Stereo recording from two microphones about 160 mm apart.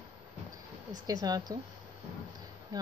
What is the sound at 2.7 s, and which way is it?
Speech, 25° right (ahead or behind).